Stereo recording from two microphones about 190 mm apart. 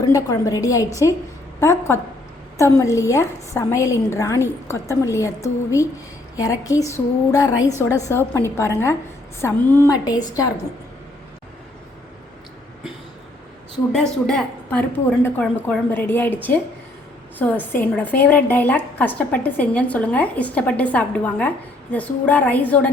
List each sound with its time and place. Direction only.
0.0 s a woman's voice: 15° left (ahead or behind)
2.6 s a woman's voice: 15° left (ahead or behind)
13.9 s a woman's voice: 5° left (ahead or behind)